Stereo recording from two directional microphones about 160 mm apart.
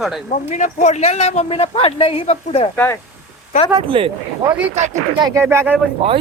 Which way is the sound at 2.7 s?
15° left (ahead or behind).